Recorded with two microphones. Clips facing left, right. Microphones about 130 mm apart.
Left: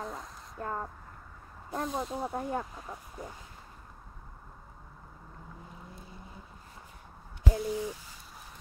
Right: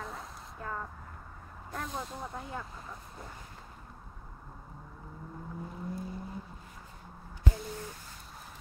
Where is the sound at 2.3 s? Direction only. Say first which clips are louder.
Left 7 dB; 45° left (ahead or behind).